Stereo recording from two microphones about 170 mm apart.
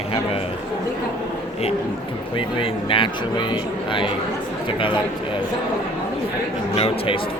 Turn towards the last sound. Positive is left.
turn(degrees=35)  # may be behind; listen again after turning